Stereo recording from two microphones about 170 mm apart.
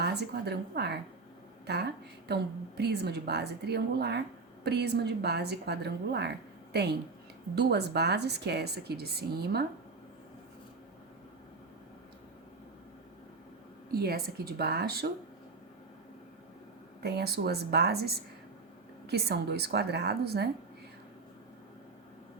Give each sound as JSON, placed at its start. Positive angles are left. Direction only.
{"t": 0.0, "sound": "a woman's voice", "side_deg": -75}
{"t": 7.5, "sound": "a woman's voice", "side_deg": -75}
{"t": 13.9, "sound": "a woman's voice", "side_deg": -65}
{"t": 17.0, "sound": "a woman's voice", "side_deg": -70}